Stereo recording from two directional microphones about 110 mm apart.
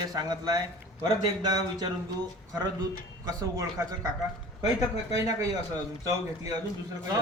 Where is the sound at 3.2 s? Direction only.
30° right (ahead or behind).